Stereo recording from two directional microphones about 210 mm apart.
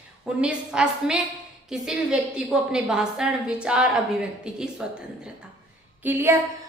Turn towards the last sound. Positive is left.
turn(degrees=-10)  # may be behind; listen again after turning